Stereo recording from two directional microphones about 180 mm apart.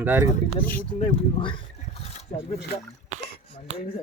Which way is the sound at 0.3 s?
50° left (ahead or behind).